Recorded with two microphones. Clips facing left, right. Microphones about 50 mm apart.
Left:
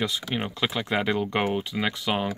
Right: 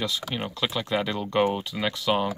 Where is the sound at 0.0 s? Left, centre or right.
Left.